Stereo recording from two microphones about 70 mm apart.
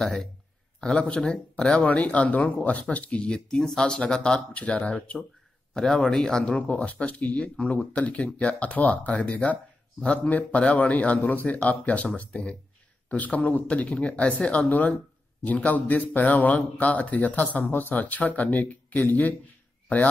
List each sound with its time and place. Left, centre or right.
0.0 s speech: centre
5.8 s speech: centre